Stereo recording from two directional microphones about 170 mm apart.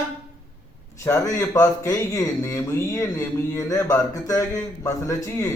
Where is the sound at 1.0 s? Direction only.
15° left (ahead or behind).